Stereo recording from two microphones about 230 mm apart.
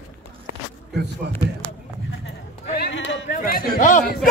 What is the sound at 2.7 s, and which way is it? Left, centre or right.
Speech, left.